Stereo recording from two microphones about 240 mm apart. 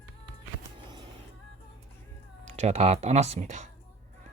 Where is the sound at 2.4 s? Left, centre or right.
Right.